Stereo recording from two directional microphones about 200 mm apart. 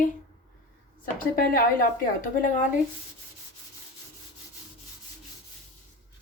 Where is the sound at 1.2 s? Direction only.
45° left (ahead or behind).